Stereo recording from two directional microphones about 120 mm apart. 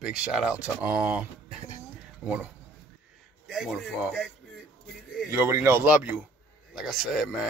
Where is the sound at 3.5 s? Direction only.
Centre (ahead or behind).